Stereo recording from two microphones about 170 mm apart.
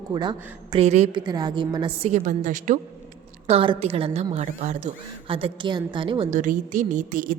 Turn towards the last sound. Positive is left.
turn(degrees=-50)  # may be behind; listen again after turning